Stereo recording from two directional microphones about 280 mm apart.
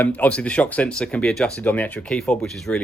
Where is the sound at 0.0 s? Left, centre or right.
Centre.